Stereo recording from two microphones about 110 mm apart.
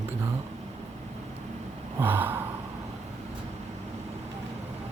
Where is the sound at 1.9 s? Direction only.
20° right (ahead or behind).